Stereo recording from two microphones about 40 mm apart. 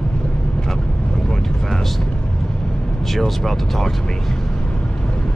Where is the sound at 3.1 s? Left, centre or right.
Centre.